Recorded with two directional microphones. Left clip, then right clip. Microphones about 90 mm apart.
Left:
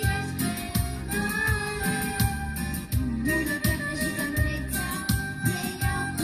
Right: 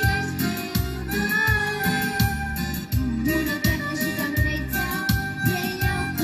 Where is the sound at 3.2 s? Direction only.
25° right (ahead or behind).